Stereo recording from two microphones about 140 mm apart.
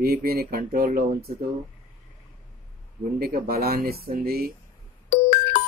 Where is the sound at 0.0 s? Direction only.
90° right.